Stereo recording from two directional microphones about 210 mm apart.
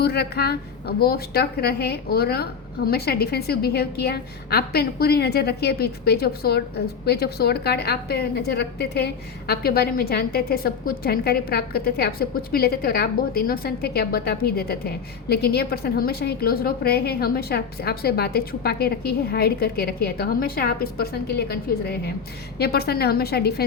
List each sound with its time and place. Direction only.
0.0 s a woman's voice: 50° left (ahead or behind)